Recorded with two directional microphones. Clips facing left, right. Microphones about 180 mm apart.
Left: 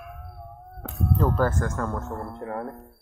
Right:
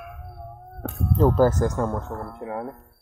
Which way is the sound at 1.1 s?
35° right (ahead or behind).